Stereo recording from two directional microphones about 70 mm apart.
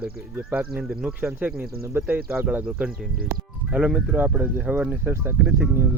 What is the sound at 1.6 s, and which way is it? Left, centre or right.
Speech, right.